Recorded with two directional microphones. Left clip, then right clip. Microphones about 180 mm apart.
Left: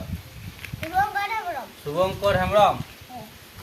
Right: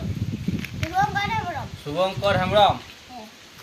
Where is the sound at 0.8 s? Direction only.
25° right (ahead or behind).